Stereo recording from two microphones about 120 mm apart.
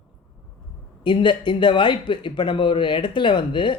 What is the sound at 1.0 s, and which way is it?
Speech, 40° left (ahead or behind).